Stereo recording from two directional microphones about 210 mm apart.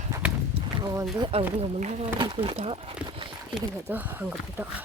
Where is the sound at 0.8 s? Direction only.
15° right (ahead or behind).